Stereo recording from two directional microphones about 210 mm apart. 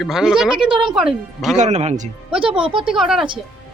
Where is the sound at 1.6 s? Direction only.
30° right (ahead or behind).